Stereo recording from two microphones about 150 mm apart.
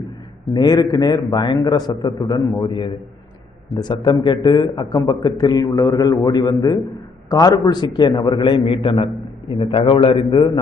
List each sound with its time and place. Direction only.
0.5 s a man's voice: 25° left (ahead or behind)